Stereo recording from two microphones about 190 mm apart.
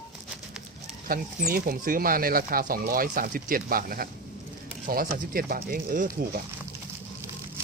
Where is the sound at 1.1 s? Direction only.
50° right (ahead or behind).